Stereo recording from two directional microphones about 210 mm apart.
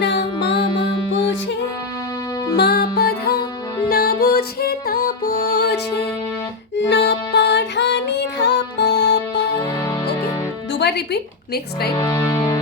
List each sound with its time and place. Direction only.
0.0 s music: 55° left (ahead or behind)
0.7 s music: 25° left (ahead or behind)
2.6 s music: 50° left (ahead or behind)
9.6 s music: 15° left (ahead or behind)
10.7 s music: 55° left (ahead or behind)
11.9 s speech: 15° left (ahead or behind)